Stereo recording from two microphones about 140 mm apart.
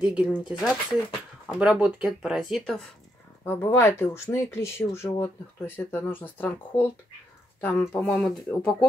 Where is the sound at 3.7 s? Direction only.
20° left (ahead or behind).